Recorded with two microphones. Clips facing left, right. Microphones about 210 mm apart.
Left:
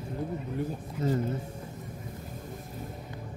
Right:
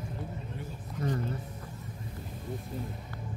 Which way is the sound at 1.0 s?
25° left (ahead or behind).